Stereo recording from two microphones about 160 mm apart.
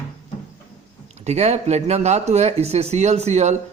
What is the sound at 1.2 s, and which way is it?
Speech, 45° right (ahead or behind).